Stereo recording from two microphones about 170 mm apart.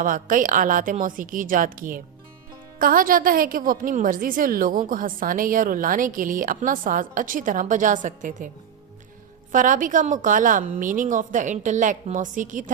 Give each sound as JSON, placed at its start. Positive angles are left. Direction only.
{"t": 0.0, "sound": "a woman's voice", "side_deg": -55}
{"t": 9.5, "sound": "a woman's voice", "side_deg": -50}